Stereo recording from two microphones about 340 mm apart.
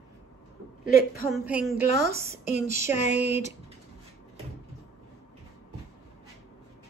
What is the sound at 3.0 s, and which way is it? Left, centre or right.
Speech, centre.